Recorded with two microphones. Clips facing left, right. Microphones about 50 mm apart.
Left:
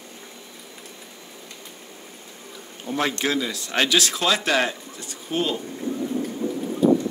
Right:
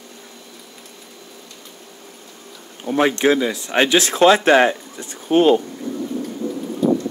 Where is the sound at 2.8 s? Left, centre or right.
Right.